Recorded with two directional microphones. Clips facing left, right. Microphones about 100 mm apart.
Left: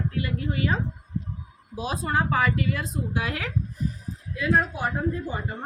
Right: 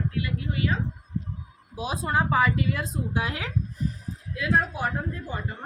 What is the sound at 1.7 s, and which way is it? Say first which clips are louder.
Speech: even; 10° right (ahead or behind).